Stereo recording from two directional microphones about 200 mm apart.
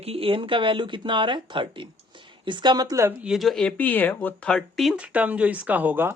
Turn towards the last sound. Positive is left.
turn(degrees=-10)  # may be behind; listen again after turning